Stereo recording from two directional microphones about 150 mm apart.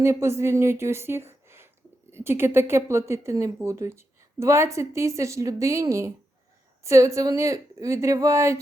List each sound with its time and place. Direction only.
0.0 s speech: 20° right (ahead or behind)